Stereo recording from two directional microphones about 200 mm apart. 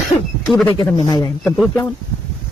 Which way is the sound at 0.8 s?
20° left (ahead or behind).